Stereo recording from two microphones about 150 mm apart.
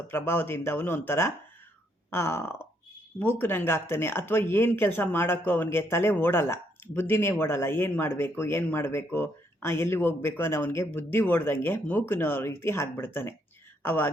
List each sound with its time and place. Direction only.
0.1 s speech: 15° left (ahead or behind)